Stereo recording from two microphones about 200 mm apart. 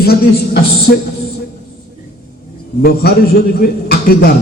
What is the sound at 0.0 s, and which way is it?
Speech, 50° left (ahead or behind).